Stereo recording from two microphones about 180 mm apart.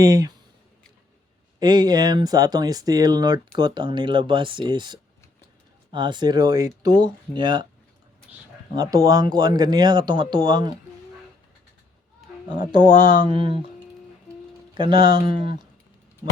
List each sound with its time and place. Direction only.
0.0 s speech: 20° right (ahead or behind)
1.5 s speech: 25° right (ahead or behind)
8.7 s speech: 20° right (ahead or behind)
12.9 s speech: 25° right (ahead or behind)
14.8 s speech: 25° right (ahead or behind)